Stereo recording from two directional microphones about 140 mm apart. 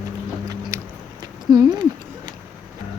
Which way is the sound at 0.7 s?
25° right (ahead or behind).